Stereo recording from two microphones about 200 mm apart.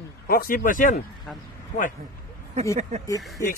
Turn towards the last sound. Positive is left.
turn(degrees=15)  # may be behind; listen again after turning